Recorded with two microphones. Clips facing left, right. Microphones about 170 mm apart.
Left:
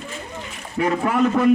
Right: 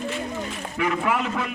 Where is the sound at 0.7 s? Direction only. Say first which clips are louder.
Left 4 dB; 35° left (ahead or behind).